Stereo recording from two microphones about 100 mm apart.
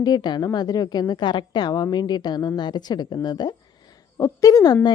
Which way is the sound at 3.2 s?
45° left (ahead or behind).